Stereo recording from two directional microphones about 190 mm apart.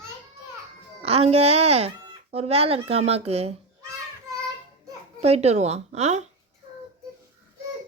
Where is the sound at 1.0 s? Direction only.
30° right (ahead or behind).